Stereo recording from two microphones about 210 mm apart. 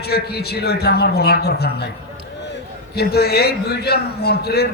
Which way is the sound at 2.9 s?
50° left (ahead or behind).